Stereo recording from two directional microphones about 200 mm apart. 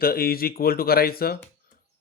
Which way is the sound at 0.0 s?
50° left (ahead or behind).